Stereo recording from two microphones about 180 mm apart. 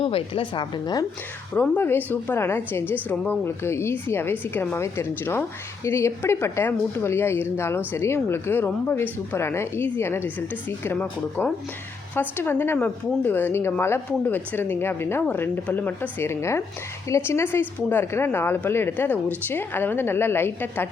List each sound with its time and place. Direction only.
0.0 s a woman's voice: 30° left (ahead or behind)
1.5 s a woman's voice: 10° left (ahead or behind)